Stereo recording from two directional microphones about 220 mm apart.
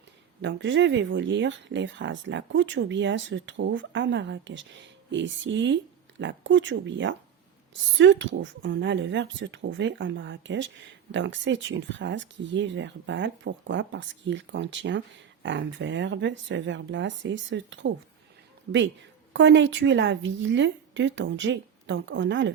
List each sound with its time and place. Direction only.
0.4 s speech: 55° right (ahead or behind)